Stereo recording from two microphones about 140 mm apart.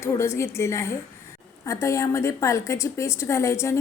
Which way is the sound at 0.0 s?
20° left (ahead or behind).